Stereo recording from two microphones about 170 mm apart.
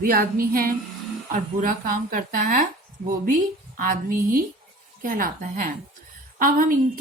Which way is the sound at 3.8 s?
55° right (ahead or behind).